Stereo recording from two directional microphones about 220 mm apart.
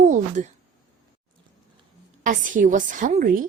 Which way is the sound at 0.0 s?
35° right (ahead or behind).